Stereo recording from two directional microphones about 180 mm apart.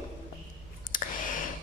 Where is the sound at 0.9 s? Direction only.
50° left (ahead or behind).